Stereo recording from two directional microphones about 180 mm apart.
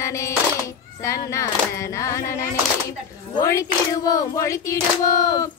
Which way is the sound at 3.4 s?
15° left (ahead or behind).